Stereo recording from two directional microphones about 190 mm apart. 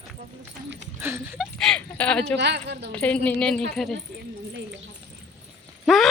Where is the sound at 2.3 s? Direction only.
65° right (ahead or behind).